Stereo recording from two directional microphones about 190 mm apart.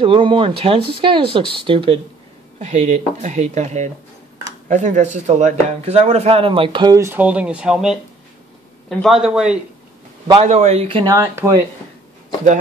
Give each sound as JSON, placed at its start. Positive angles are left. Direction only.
{"t": 0.0, "sound": "a man's voice", "side_deg": -25}
{"t": 10.4, "sound": "speech", "side_deg": -35}